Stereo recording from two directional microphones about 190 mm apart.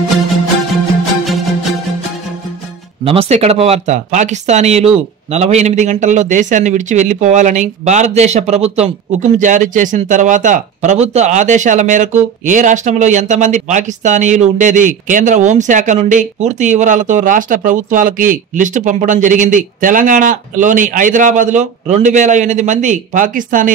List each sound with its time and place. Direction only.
1.2 s music: centre (ahead or behind)
3.1 s a man's voice: 35° right (ahead or behind)